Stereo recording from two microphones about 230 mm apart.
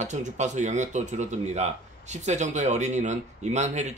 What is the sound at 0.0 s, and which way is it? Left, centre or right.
Speech, right.